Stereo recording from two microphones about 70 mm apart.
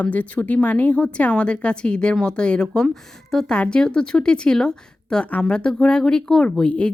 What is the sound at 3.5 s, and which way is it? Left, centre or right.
Speech, centre.